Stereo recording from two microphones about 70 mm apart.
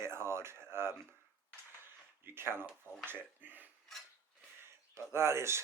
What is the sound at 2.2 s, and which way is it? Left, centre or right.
Speech, right.